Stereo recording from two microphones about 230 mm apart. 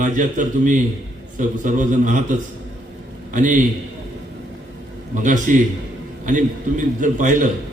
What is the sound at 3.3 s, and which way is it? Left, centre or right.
Speech, right.